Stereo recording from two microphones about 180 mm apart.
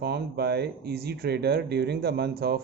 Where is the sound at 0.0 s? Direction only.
65° right (ahead or behind).